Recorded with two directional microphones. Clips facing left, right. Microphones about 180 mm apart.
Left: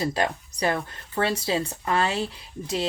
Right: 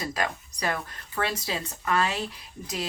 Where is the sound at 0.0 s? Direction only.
30° left (ahead or behind).